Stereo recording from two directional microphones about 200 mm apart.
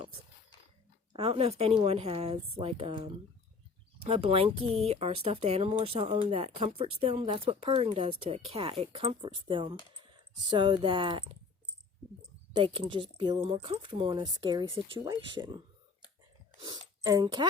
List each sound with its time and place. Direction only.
1.1 s speech: 30° right (ahead or behind)
12.5 s speech: 25° right (ahead or behind)